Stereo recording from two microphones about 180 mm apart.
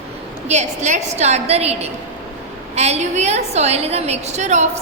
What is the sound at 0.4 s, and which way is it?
A woman's voice, 40° right (ahead or behind).